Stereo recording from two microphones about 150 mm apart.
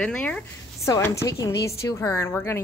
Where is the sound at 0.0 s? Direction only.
5° left (ahead or behind).